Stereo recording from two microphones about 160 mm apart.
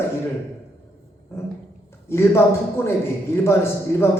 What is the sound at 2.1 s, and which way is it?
Speech, 15° left (ahead or behind).